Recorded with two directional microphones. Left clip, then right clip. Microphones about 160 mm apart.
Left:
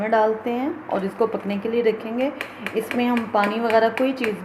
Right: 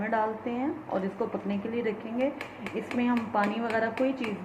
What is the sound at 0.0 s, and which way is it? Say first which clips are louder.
Speech: left 9 dB; 65° left (ahead or behind).